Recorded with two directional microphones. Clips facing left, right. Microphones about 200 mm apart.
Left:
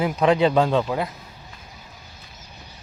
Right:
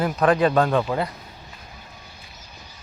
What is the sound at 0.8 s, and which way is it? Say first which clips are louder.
Speech: even; centre (ahead or behind).